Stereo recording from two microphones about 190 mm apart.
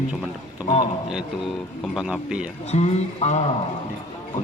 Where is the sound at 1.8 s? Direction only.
Centre (ahead or behind).